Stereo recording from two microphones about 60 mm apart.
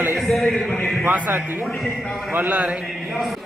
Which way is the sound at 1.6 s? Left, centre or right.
Centre.